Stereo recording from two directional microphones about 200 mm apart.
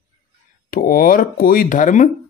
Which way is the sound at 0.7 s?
45° left (ahead or behind).